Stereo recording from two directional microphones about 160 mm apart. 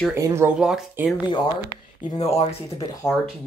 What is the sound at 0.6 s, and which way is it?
Speech, 5° right (ahead or behind).